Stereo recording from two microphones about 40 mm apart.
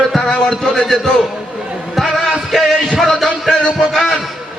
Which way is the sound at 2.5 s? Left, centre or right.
Centre.